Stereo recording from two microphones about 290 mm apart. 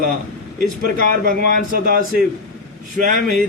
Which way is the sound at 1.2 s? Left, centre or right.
Right.